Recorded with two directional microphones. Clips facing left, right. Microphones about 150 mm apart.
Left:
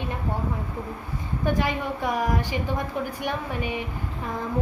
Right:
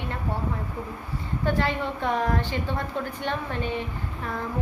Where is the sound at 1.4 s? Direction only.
15° left (ahead or behind).